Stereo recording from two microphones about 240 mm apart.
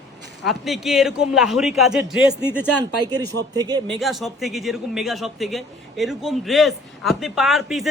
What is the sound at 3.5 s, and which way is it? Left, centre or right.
Speech, centre.